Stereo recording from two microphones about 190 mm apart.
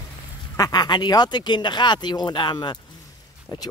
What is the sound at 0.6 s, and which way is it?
Speech, 20° left (ahead or behind).